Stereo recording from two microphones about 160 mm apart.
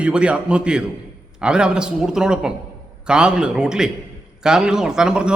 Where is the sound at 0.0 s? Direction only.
5° right (ahead or behind).